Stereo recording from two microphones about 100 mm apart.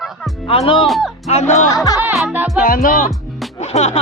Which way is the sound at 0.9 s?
Centre (ahead or behind).